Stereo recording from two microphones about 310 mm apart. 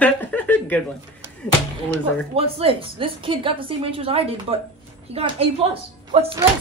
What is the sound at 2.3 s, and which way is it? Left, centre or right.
A woman's voice, centre.